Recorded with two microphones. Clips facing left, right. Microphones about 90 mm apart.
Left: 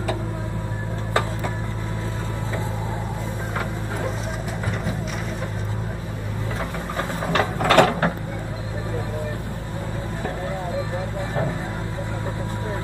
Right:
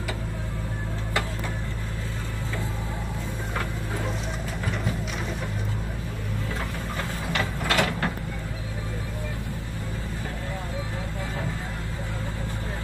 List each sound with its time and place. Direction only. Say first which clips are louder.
7.3 s mechanisms: left 9 dB; 50° left (ahead or behind)